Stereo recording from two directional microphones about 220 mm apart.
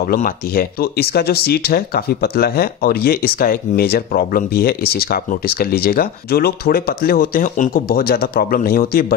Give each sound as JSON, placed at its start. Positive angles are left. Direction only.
{"t": 0.0, "sound": "speech", "side_deg": 40}